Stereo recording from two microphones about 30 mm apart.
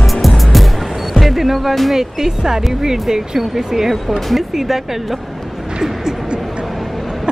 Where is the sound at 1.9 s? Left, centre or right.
Centre.